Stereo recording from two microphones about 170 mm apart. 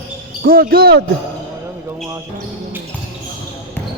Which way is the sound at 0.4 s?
60° right (ahead or behind).